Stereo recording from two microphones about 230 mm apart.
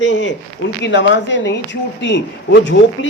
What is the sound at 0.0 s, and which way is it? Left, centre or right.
Speech, left.